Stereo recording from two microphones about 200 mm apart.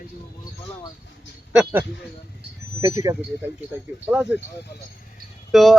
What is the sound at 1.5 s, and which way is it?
A man's voice, 5° right (ahead or behind).